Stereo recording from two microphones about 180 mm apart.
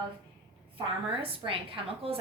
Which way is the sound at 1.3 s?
30° right (ahead or behind).